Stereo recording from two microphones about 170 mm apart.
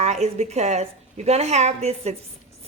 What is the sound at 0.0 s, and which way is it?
A woman's voice, 40° right (ahead or behind).